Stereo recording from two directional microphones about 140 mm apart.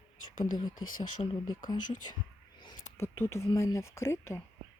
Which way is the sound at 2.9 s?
15° left (ahead or behind).